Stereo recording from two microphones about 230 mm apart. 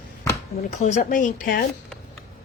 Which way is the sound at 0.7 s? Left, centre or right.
Left.